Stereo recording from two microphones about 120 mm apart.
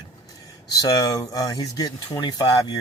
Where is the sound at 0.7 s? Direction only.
30° left (ahead or behind).